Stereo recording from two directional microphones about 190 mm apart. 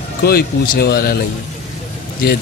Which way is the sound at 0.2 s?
55° left (ahead or behind).